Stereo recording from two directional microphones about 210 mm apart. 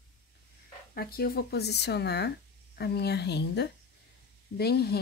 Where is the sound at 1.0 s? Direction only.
45° left (ahead or behind).